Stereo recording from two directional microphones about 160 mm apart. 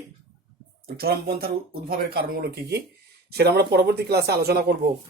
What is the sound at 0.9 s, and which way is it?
A man's voice, 70° right (ahead or behind).